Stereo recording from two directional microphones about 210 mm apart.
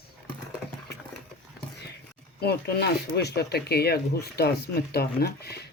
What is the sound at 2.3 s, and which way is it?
Speech, 50° left (ahead or behind).